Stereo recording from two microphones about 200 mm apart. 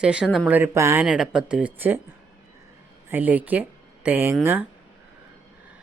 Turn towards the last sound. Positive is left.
turn(degrees=-10)  # may be behind; listen again after turning